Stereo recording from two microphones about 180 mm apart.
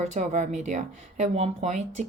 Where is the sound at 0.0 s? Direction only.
40° right (ahead or behind).